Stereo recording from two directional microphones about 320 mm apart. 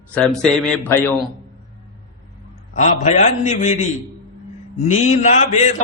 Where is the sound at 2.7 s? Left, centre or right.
Left.